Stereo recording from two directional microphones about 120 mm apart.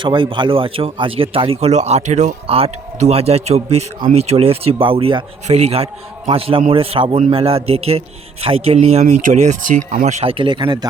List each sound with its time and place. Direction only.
0.0 s speech: 45° right (ahead or behind); by 2.3 s 80° right
2.5 s a man's voice: 60° right (ahead or behind)
5.5 s a man's voice: 65° right (ahead or behind)
10.2 s speech: 45° right (ahead or behind)